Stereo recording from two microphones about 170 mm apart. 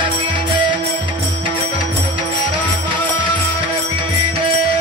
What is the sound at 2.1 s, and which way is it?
Music, 30° right (ahead or behind).